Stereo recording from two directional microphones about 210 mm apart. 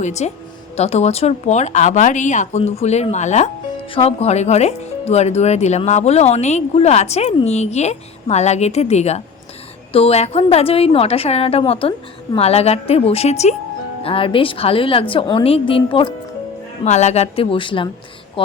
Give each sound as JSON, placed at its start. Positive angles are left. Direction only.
{"t": 0.0, "sound": "a woman's voice", "side_deg": 30}